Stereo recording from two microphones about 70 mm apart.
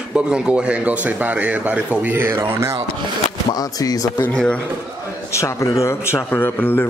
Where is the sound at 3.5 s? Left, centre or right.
Left.